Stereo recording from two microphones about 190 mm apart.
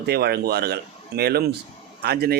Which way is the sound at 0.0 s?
55° right (ahead or behind).